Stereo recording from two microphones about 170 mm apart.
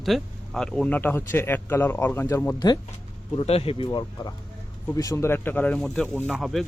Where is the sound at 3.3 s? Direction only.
35° left (ahead or behind); by 6.7 s centre (ahead or behind).